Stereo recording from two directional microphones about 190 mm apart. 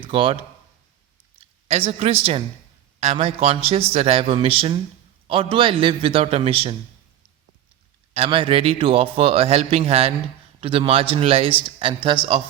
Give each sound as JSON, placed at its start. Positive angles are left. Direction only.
{"t": 0.0, "sound": "speech", "side_deg": -25}
{"t": 1.4, "sound": "a woman's voice", "side_deg": -30}
{"t": 8.1, "sound": "a man's voice", "side_deg": -30}